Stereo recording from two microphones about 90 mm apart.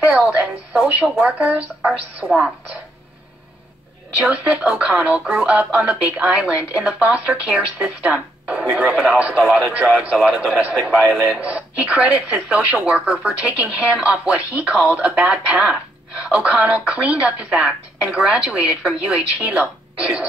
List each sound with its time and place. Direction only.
1.2 s speech: 15° right (ahead or behind)
4.2 s speech: 15° right (ahead or behind)